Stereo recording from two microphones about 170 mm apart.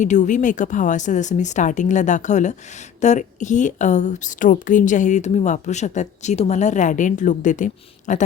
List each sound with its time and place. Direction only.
0.0 s a woman's voice: 45° left (ahead or behind)